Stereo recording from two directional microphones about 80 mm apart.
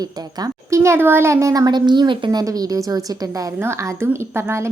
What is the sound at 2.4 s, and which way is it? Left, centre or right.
A woman's voice, right.